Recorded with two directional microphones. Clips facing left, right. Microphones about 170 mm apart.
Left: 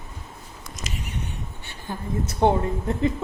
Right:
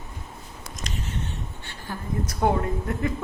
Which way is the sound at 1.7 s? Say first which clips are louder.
Left 2 dB; 25° left (ahead or behind).